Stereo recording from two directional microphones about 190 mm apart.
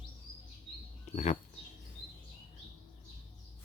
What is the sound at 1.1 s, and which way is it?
Speech, 35° left (ahead or behind).